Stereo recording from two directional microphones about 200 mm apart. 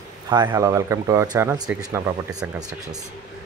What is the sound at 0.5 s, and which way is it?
Speech, 15° right (ahead or behind).